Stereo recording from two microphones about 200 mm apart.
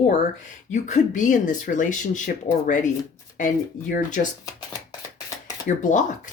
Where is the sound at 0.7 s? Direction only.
40° left (ahead or behind).